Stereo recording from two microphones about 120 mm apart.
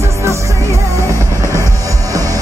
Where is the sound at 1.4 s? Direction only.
25° left (ahead or behind).